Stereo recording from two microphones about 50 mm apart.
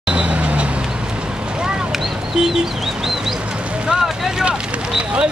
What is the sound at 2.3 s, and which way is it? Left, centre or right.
Bird, centre.